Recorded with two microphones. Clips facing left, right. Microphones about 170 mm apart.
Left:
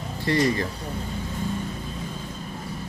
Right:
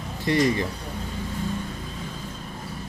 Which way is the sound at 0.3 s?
15° right (ahead or behind).